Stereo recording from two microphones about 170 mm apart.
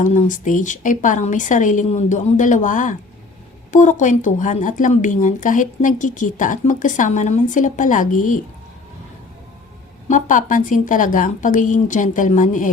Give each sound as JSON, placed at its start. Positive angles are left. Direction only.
{"t": 0.0, "sound": "speech", "side_deg": 50}
{"t": 10.1, "sound": "speech", "side_deg": 50}